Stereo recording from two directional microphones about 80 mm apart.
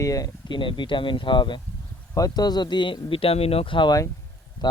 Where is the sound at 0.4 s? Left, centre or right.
Left.